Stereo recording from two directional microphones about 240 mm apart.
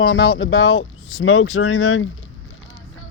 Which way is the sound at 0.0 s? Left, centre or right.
Left.